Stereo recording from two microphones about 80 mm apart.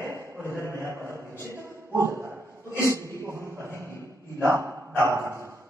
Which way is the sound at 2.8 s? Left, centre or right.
Right.